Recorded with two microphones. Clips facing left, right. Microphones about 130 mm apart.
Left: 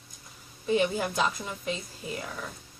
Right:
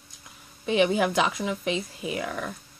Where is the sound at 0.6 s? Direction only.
90° right.